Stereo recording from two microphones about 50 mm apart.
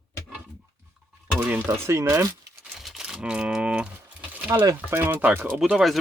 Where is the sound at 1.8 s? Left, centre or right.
Right.